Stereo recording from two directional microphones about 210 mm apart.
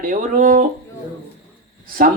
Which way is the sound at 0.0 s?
40° right (ahead or behind).